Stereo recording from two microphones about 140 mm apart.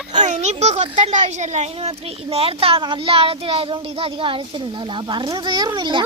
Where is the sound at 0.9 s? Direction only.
60° right (ahead or behind); by 6.1 s 35° right (ahead or behind).